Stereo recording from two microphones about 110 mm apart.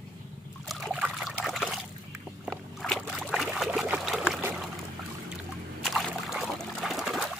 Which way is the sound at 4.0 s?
5° right (ahead or behind).